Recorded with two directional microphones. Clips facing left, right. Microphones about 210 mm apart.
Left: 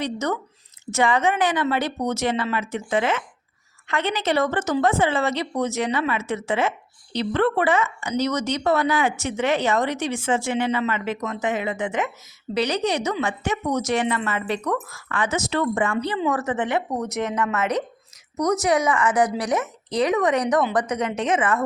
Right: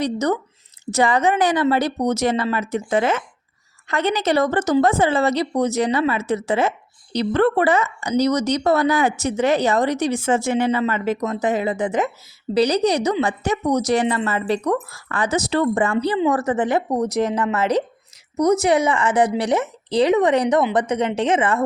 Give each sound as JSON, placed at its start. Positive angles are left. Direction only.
{"t": 0.0, "sound": "a woman's voice", "side_deg": -35}